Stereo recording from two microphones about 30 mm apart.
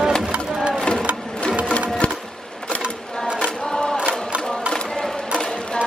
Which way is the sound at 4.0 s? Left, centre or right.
Right.